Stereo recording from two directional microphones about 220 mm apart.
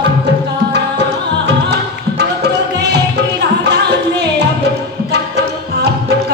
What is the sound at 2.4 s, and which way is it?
Music, 50° right (ahead or behind).